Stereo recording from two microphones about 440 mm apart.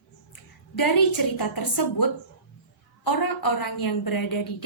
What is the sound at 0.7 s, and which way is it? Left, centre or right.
A woman's voice, left.